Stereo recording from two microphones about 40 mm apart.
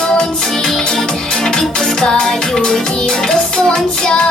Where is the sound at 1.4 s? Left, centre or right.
Centre.